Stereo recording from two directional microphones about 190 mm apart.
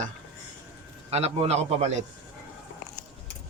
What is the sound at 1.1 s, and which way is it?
Speech, 30° right (ahead or behind).